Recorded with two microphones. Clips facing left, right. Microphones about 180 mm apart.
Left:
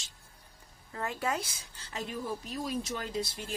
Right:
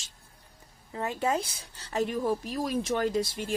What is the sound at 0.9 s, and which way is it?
Speech, 20° right (ahead or behind).